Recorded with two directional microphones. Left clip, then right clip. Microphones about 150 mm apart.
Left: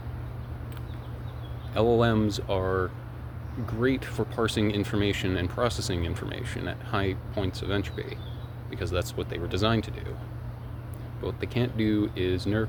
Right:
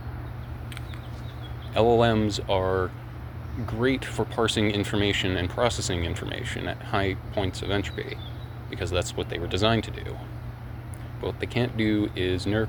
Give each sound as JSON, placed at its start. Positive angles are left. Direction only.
{"t": 1.7, "sound": "speech", "side_deg": 10}
{"t": 11.2, "sound": "speech", "side_deg": 15}